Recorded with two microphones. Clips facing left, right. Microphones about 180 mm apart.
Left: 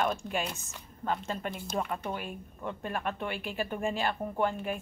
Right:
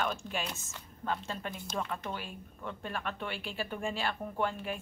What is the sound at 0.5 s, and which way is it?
A woman's voice, 15° left (ahead or behind).